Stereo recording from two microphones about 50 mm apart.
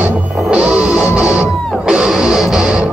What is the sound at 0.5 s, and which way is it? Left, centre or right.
Music, right.